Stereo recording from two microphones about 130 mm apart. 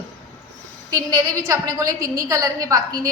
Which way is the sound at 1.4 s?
25° right (ahead or behind).